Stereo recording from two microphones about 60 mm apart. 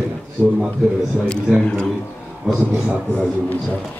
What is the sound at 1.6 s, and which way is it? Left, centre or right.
Speech, centre.